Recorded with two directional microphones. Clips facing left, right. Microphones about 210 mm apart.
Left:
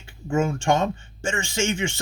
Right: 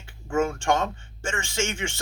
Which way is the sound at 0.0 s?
15° left (ahead or behind).